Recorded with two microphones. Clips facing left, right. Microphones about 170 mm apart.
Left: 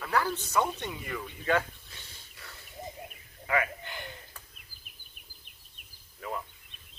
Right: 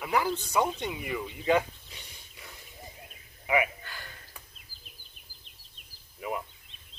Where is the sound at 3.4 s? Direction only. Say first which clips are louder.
Right 3 dB; 15° right (ahead or behind).